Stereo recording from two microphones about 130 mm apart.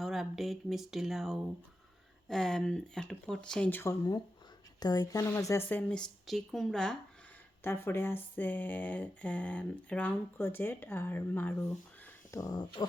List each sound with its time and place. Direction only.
0.0 s speech: centre (ahead or behind); by 3.9 s 15° left (ahead or behind)
4.8 s speech: 30° left (ahead or behind)
5.6 s speech: 10° left (ahead or behind)
7.6 s speech: 15° left (ahead or behind)
12.0 s a sound: 25° left (ahead or behind)